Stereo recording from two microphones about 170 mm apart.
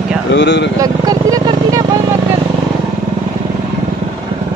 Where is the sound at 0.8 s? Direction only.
20° right (ahead or behind).